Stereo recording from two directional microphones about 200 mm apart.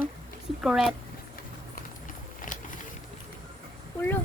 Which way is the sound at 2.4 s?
40° left (ahead or behind).